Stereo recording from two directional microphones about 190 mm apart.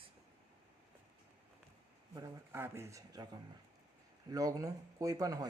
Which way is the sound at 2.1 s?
15° right (ahead or behind).